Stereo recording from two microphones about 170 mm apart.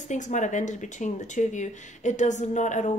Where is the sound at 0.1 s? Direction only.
45° left (ahead or behind).